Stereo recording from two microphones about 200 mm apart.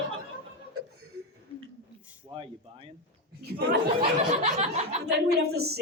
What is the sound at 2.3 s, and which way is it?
Speech, 25° right (ahead or behind).